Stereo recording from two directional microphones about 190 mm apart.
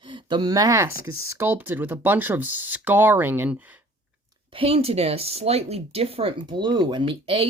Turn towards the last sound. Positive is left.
turn(degrees=-30)  # may be behind; listen again after turning